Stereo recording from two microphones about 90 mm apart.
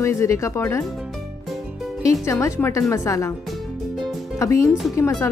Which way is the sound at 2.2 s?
35° left (ahead or behind).